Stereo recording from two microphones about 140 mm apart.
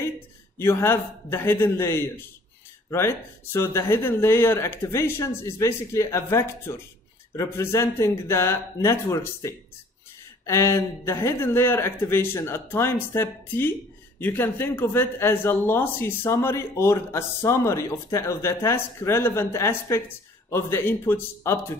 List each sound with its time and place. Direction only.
0.6 s speech: 15° left (ahead or behind)